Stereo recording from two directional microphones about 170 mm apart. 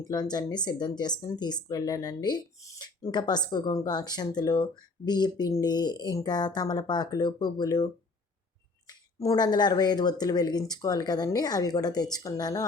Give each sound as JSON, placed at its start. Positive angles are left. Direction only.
{"t": 0.0, "sound": "speech", "side_deg": 25}
{"t": 8.9, "sound": "speech", "side_deg": 20}